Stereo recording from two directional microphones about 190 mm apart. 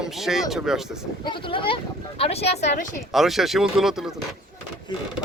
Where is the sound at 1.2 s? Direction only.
25° left (ahead or behind).